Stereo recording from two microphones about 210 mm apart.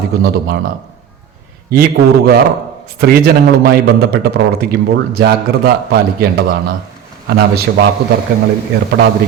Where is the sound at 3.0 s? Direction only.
45° right (ahead or behind).